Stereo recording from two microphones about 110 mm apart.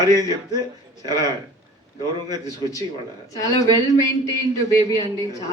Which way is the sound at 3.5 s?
30° left (ahead or behind).